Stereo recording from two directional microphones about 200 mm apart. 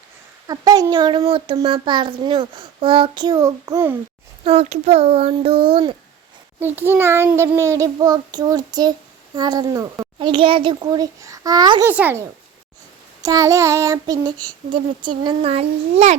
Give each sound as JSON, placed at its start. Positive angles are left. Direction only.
{"t": 0.4, "sound": "a child's voice", "side_deg": -20}
{"t": 4.4, "sound": "a child's voice", "side_deg": -30}
{"t": 6.6, "sound": "a child's voice", "side_deg": -10}
{"t": 11.9, "sound": "child singing", "side_deg": -10}
{"t": 13.2, "sound": "child singing", "side_deg": -15}
{"t": 14.4, "sound": "a child's voice", "side_deg": -25}